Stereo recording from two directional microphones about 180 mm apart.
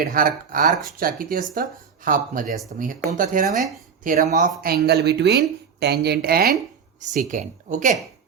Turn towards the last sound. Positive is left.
turn(degrees=-45)  # may be behind; listen again after turning